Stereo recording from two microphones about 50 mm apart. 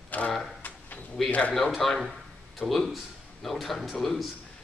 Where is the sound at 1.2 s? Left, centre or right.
Centre.